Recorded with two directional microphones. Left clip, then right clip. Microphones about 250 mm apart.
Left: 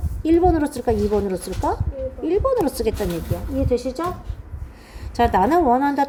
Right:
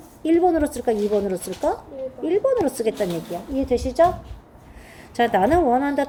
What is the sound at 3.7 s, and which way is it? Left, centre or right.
Speech, left.